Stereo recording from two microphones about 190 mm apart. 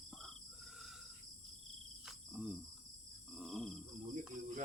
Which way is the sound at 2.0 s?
5° right (ahead or behind).